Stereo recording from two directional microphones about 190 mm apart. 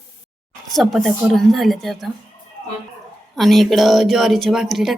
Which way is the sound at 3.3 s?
Centre (ahead or behind).